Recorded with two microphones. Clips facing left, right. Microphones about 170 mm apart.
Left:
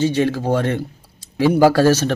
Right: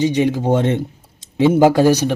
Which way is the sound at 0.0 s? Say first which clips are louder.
Right 2 dB; 15° right (ahead or behind).